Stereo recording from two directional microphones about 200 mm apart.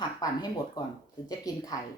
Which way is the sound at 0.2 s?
20° left (ahead or behind).